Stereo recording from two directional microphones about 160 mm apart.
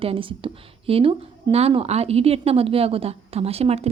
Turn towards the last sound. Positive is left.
turn(degrees=-40)  # may be behind; listen again after turning